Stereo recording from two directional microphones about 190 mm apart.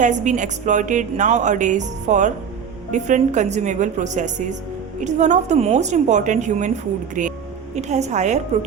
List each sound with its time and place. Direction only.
0.0 s a woman's voice: 40° right (ahead or behind)